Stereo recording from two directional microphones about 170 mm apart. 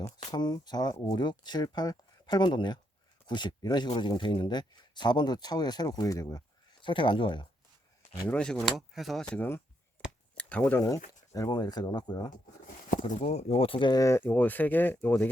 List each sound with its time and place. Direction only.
0.3 s speech: 25° left (ahead or behind)
8.3 s speech: 5° left (ahead or behind); by 12.3 s 25° left (ahead or behind)
13.1 s speech: 40° left (ahead or behind); by 15.3 s 10° left (ahead or behind)